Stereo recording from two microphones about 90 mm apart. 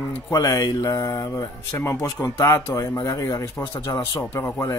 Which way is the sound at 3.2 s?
45° left (ahead or behind).